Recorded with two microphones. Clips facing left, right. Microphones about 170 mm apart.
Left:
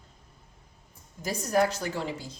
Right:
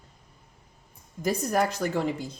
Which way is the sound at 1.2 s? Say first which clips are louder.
Even; 55° right (ahead or behind).